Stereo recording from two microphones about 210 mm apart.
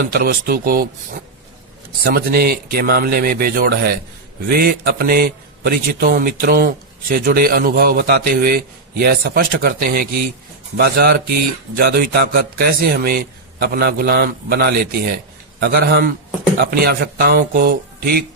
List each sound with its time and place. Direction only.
0.1 s a man's voice: 45° right (ahead or behind)
2.0 s a man's voice: 45° right (ahead or behind)